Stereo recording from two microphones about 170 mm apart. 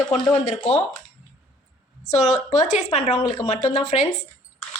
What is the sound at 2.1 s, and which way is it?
A woman's voice, 40° left (ahead or behind).